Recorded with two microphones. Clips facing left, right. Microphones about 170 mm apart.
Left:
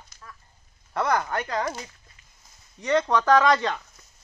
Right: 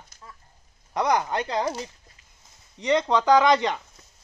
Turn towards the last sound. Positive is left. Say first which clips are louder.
# right 1 dB
turn(degrees=-20)  # may be behind; listen again after turning